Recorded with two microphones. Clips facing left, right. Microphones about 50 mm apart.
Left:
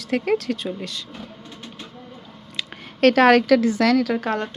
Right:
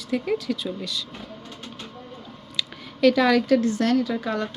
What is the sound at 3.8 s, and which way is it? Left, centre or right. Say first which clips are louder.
Speech: left 4 dB; left.